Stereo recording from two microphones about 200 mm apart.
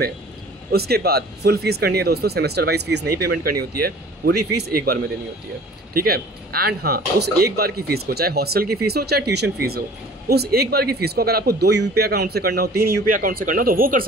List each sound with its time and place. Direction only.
0.7 s speech: 50° right (ahead or behind)
5.9 s speech: 50° right (ahead or behind)